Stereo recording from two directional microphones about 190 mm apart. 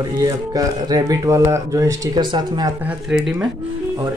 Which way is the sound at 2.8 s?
5° right (ahead or behind).